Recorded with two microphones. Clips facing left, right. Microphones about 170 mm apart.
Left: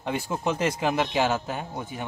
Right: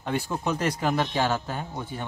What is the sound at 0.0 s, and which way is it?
A man's voice, 15° left (ahead or behind).